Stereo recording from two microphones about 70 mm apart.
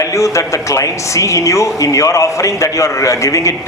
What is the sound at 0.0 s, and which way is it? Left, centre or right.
Speech, left.